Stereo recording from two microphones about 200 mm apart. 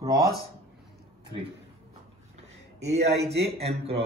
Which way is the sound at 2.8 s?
30° right (ahead or behind).